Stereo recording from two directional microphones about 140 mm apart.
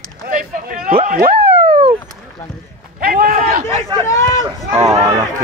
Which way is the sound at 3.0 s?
90° right.